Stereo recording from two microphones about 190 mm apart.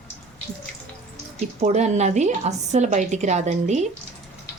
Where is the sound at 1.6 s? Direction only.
35° right (ahead or behind).